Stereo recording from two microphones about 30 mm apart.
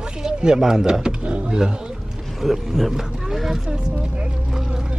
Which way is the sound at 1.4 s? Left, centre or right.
Right.